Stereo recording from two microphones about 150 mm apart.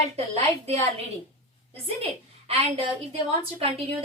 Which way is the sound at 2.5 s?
40° right (ahead or behind).